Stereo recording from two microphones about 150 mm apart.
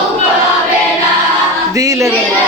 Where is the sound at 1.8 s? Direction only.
20° right (ahead or behind).